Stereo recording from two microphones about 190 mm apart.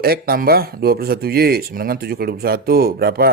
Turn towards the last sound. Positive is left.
turn(degrees=-55)  # may be behind; listen again after turning